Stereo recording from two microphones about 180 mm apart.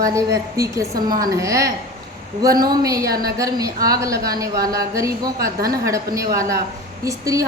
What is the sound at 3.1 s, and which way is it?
Speech, 55° right (ahead or behind).